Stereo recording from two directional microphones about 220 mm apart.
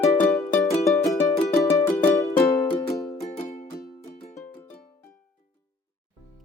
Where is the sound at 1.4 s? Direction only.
15° left (ahead or behind).